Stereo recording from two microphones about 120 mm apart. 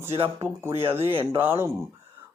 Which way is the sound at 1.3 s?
20° right (ahead or behind).